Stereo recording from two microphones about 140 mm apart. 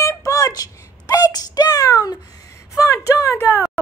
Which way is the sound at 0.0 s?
25° left (ahead or behind).